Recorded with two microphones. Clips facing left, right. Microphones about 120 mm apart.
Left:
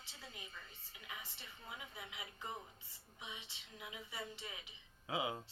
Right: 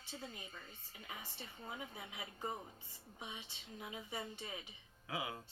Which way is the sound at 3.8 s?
35° right (ahead or behind).